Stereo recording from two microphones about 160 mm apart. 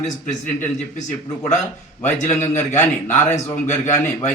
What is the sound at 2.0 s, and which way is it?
Speech, 45° left (ahead or behind).